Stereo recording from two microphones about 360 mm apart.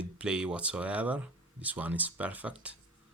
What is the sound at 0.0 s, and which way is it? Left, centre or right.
Speech, centre.